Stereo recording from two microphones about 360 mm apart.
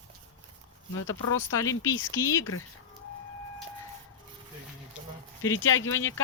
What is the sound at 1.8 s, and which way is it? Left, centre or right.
Speech, centre.